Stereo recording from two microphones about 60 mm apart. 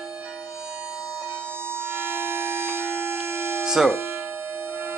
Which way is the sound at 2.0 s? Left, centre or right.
Right.